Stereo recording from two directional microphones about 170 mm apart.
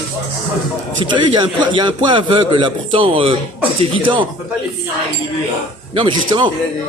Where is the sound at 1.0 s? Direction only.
25° right (ahead or behind).